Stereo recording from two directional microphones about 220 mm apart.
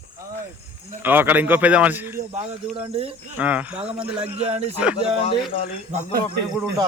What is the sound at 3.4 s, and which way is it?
Speech, 5° right (ahead or behind).